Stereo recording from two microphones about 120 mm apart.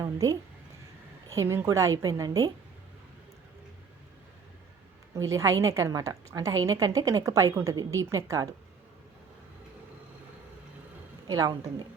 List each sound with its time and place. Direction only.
0.0 s a woman's voice: 25° right (ahead or behind)
5.1 s a woman's voice: 25° right (ahead or behind)
11.3 s a woman's voice: 30° right (ahead or behind)